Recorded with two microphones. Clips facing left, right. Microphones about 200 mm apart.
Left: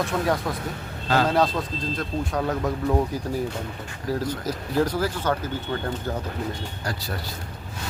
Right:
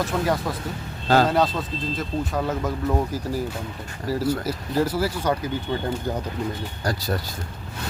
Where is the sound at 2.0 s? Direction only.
Centre (ahead or behind).